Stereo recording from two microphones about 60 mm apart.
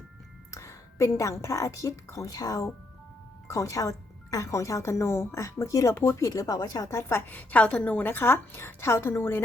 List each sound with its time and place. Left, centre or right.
0.5 s a woman's voice: left
3.5 s speech: left
5.9 s speech: left
7.3 s a woman's voice: left